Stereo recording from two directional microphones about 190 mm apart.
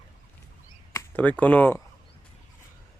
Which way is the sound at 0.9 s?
10° left (ahead or behind).